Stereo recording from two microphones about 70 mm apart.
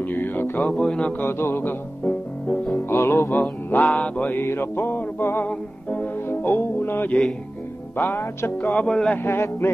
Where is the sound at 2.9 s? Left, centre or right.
Left.